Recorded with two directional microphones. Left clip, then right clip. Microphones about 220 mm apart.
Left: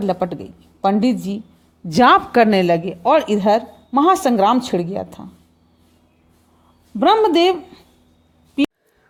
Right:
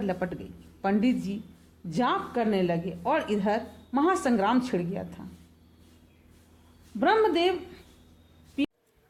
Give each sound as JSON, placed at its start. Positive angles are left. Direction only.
{"t": 0.0, "sound": "a woman's voice", "side_deg": 30}
{"t": 1.9, "sound": "a woman's voice", "side_deg": 40}
{"t": 7.0, "sound": "a woman's voice", "side_deg": 35}
{"t": 8.6, "sound": "a sound", "side_deg": 35}